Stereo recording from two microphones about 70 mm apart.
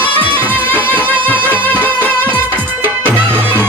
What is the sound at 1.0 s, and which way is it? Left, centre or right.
Music, left.